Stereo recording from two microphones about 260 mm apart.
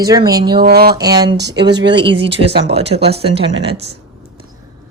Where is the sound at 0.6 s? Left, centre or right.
Right.